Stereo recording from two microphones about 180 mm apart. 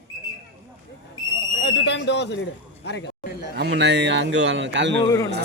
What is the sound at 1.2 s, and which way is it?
Speech, 20° left (ahead or behind).